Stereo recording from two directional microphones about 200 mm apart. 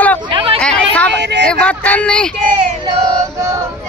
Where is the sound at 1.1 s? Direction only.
60° right (ahead or behind).